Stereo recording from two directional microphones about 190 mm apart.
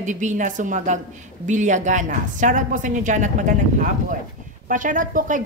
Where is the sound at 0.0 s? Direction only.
40° right (ahead or behind).